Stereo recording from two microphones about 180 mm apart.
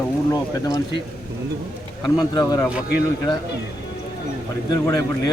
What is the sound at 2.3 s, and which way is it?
Speech, 20° left (ahead or behind).